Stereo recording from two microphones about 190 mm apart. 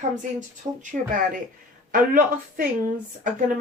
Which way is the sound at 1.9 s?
45° right (ahead or behind).